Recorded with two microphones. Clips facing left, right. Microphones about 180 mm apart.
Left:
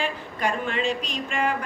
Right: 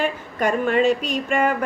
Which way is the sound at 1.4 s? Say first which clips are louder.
Right 3 dB; 50° right (ahead or behind).